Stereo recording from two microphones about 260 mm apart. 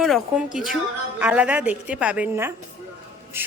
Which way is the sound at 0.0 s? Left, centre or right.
Centre.